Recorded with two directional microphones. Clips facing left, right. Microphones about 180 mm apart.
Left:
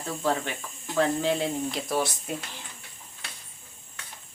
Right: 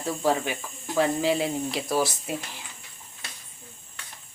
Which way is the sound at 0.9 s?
5° right (ahead or behind).